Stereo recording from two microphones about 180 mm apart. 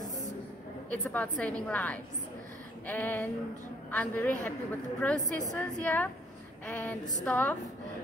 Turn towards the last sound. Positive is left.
turn(degrees=10)  # may be behind; listen again after turning